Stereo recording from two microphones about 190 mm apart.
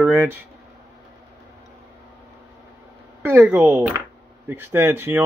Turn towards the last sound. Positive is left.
turn(degrees=-10)  # may be behind; listen again after turning